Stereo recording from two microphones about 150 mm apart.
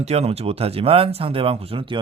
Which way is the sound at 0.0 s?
45° right (ahead or behind).